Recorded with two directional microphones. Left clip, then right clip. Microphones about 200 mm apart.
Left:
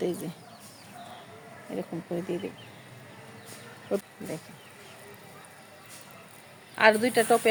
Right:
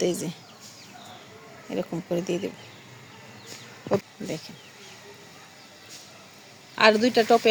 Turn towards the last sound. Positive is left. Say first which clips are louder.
# right 3 dB
turn(degrees=-45)  # may be behind; listen again after turning